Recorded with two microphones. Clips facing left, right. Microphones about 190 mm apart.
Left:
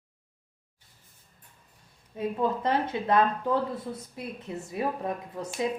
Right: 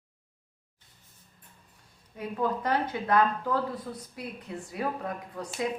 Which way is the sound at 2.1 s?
25° left (ahead or behind).